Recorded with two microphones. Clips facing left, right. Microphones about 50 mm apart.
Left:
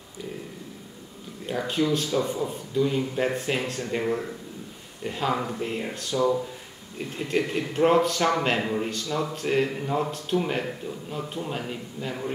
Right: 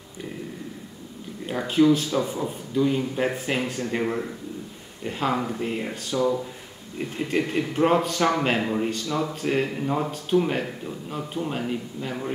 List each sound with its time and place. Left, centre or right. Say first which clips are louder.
1.4 s speech: right 5 dB; centre
5.0 s a man's voice: right 1 dB; centre